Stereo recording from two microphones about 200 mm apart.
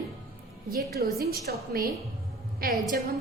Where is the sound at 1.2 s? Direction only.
50° right (ahead or behind).